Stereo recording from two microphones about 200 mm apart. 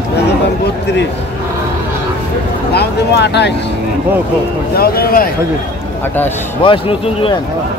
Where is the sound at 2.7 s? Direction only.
55° left (ahead or behind).